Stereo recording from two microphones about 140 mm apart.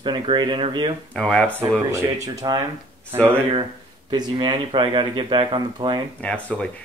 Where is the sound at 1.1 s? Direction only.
5° left (ahead or behind).